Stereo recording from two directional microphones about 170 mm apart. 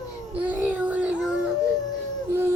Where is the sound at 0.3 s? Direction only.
10° right (ahead or behind).